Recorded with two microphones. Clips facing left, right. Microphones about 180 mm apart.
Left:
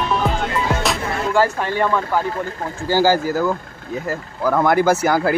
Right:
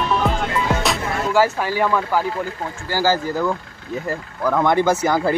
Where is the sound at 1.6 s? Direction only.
5° right (ahead or behind).